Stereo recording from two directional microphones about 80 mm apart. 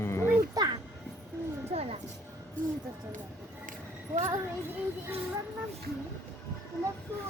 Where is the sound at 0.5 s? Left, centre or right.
Right.